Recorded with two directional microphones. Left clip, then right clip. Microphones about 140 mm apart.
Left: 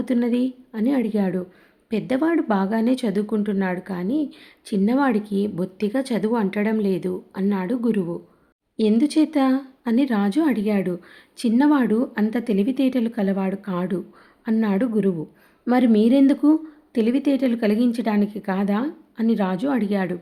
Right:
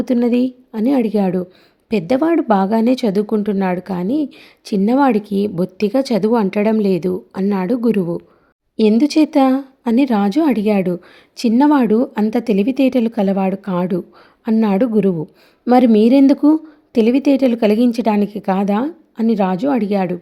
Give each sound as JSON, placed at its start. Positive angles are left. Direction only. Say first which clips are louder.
{"t": 0.0, "sound": "speech", "louder": "right 6 dB", "side_deg": -50}